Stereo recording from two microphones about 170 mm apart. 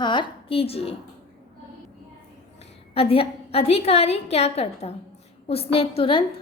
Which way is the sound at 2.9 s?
35° left (ahead or behind).